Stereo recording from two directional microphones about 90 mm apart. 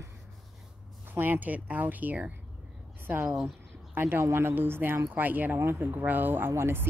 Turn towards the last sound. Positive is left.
turn(degrees=-25)  # may be behind; listen again after turning